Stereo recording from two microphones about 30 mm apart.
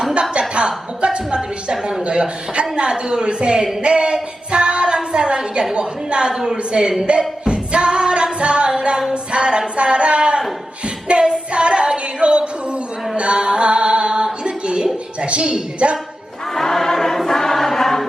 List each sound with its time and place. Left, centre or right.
0.1 s a woman's voice: right
1.7 s speech: centre
2.0 s a woman's voice: right
3.8 s a sound: right
5.7 s a woman's voice: right
7.2 s singing: right
9.3 s a sound: right
11.2 s female singing: right
12.2 s music: right
13.1 s mantra: right
14.4 s a sound: right
15.2 s a woman's voice: right
16.6 s choir: centre